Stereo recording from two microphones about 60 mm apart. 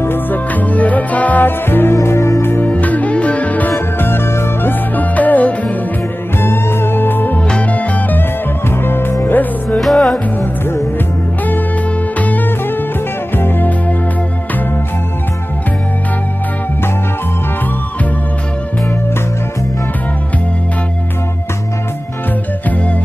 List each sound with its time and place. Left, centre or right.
0.0 s music: left
2.0 s music: left
2.6 s music: left
4.0 s music: left
4.9 s music: left
6.4 s music: left
7.4 s music: left
8.6 s music: left
9.8 s music: centre
12.2 s music: left